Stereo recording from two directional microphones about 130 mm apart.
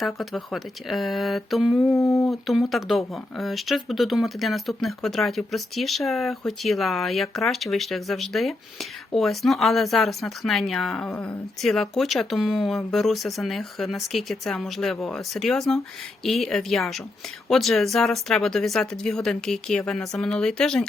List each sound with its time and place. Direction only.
0.0 s speech: centre (ahead or behind)
1.8 s speech: 25° left (ahead or behind)
2.2 s speech: centre (ahead or behind)